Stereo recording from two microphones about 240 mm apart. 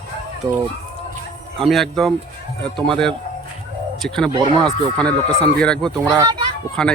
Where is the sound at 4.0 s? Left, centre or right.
Centre.